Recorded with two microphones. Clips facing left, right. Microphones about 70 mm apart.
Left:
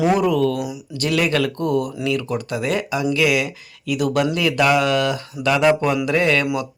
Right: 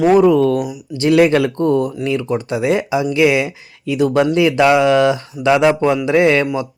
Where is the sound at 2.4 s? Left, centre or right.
Centre.